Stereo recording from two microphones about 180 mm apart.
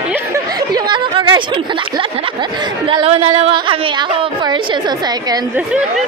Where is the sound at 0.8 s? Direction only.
25° right (ahead or behind).